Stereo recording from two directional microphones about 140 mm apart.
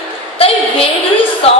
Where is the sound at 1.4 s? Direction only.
45° left (ahead or behind).